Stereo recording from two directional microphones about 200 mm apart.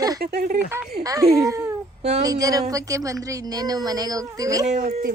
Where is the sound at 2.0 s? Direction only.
35° right (ahead or behind).